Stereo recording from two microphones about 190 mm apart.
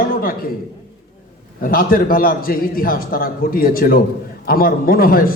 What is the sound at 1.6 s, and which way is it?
A man's voice, 50° left (ahead or behind).